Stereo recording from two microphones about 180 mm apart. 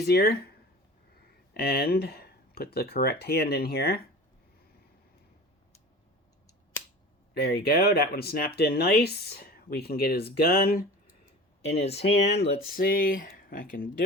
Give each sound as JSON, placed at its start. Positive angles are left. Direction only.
{"t": 0.0, "sound": "speech", "side_deg": 65}
{"t": 1.5, "sound": "speech", "side_deg": 60}
{"t": 7.3, "sound": "speech", "side_deg": 60}
{"t": 11.7, "sound": "speech", "side_deg": 35}
{"t": 12.2, "sound": "speech", "side_deg": 65}